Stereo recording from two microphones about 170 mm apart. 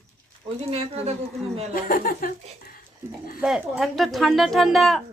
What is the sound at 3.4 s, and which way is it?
Speech, centre (ahead or behind).